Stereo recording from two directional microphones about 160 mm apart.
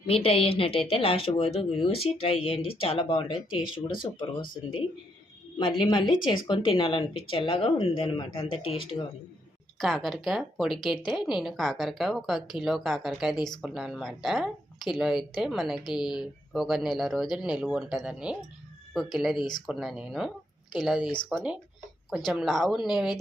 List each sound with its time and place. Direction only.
0.1 s speech: 35° left (ahead or behind)
5.5 s speech: 30° left (ahead or behind)
9.7 s speech: centre (ahead or behind)
13.3 s speech: 25° left (ahead or behind)
13.6 s speech: 5° right (ahead or behind)